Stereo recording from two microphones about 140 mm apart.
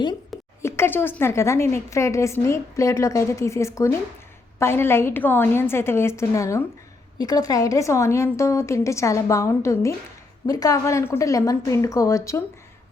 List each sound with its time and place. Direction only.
0.6 s a woman's voice: 15° left (ahead or behind)